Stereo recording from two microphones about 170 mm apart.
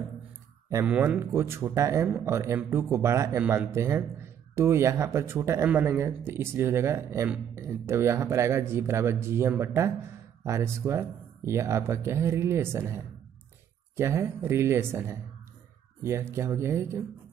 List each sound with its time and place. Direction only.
0.8 s speech: 10° right (ahead or behind)